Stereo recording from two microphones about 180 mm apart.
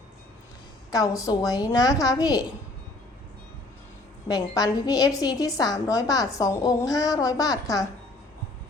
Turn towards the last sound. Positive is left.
turn(degrees=20)  # may be behind; listen again after turning